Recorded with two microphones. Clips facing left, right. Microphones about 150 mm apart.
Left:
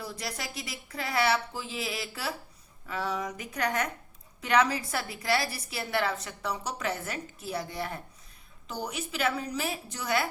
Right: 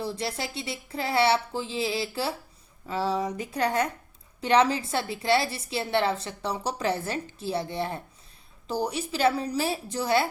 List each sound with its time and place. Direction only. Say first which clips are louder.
0.0 s a woman's voice: right 6 dB; 25° right (ahead or behind)